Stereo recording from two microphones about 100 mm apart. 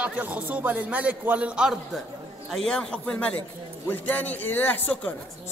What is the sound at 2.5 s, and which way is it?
A woman's voice, 5° left (ahead or behind).